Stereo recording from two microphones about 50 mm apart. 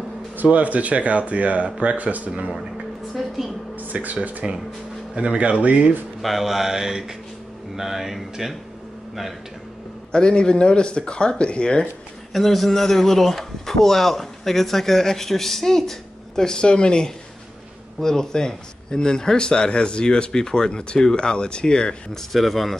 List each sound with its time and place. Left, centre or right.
0.4 s speech: right
3.2 s a sound: centre
3.7 s speech: right
6.2 s mantra: centre
7.7 s speech: centre
10.1 s speech: centre
12.3 s speech: centre
22.3 s speech: centre